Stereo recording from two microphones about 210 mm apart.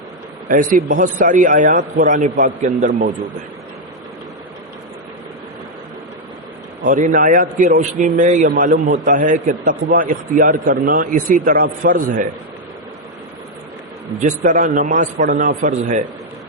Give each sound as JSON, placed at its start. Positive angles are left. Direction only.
{"t": 0.4, "sound": "a man's voice", "side_deg": -40}
{"t": 6.8, "sound": "a man's voice", "side_deg": -40}
{"t": 14.2, "sound": "a man's voice", "side_deg": -35}